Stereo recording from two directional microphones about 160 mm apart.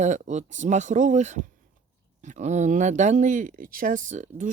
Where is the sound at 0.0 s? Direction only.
50° right (ahead or behind).